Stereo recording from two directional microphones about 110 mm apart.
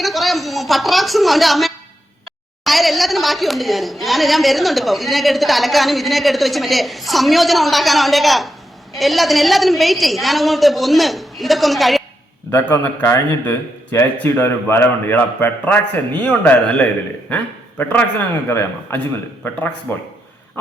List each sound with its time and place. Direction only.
0.0 s a sound: centre (ahead or behind)
2.6 s a woman's voice: centre (ahead or behind)
12.5 s a man's voice: 20° left (ahead or behind)